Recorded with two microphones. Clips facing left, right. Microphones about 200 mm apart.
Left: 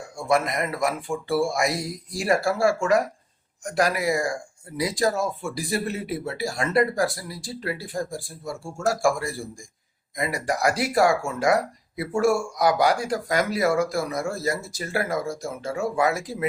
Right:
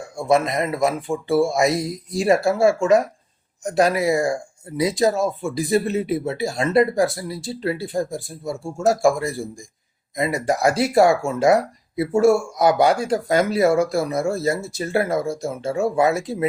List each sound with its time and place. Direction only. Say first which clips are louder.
0.2 s speech: right 4 dB; 25° right (ahead or behind)